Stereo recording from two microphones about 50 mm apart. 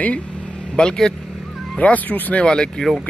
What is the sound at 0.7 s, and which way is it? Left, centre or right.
Speech, centre.